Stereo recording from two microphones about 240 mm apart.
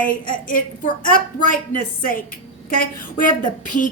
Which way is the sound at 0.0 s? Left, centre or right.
Left.